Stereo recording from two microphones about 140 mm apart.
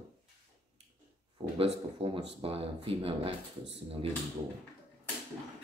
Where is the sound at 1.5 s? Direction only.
40° right (ahead or behind).